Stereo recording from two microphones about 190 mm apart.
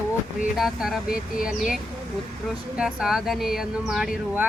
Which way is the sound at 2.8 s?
5° right (ahead or behind).